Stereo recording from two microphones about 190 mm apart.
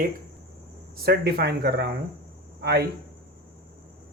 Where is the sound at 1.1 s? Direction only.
55° right (ahead or behind).